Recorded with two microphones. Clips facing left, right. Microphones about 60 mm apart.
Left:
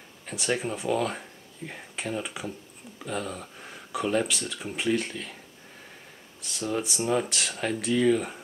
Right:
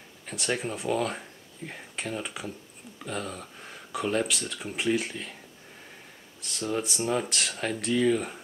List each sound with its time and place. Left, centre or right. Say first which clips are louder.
0.3 s speech: left 2 dB; centre
6.4 s speech: even; centre